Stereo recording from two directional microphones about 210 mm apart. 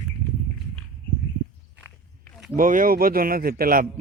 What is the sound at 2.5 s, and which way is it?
A man's voice, 40° right (ahead or behind).